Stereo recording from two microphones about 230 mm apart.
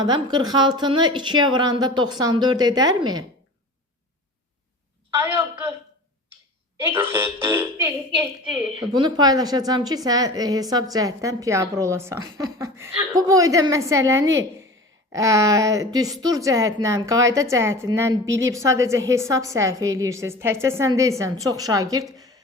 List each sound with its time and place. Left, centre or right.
0.0 s speech: centre
5.1 s a sound: centre
6.7 s a woman's voice: centre